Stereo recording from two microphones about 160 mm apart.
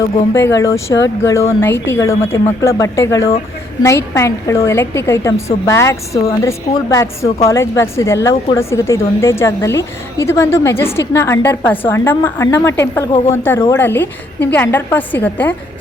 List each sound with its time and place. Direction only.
0.3 s a woman's voice: 15° left (ahead or behind)
7.3 s a woman's voice: 40° left (ahead or behind)
7.5 s a woman's voice: 15° left (ahead or behind)